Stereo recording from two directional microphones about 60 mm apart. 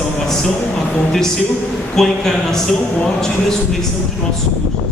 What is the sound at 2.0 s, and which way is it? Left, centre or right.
A man's voice, centre.